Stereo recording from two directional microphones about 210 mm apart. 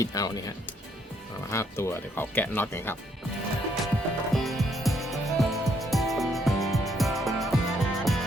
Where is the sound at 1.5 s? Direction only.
10° left (ahead or behind).